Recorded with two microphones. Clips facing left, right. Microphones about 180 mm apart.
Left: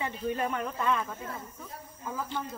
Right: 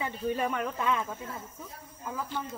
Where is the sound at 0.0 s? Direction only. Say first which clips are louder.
Right 1 dB; 5° right (ahead or behind).